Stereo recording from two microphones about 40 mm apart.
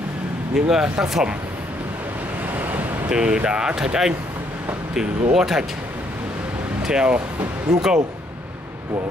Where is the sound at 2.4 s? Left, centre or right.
Right.